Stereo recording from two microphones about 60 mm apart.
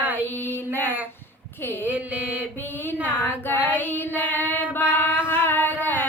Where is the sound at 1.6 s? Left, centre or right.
Left.